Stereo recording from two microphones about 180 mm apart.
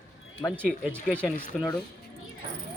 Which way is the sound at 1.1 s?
5° left (ahead or behind).